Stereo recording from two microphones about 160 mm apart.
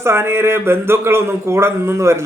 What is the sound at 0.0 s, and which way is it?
Speech, 15° right (ahead or behind).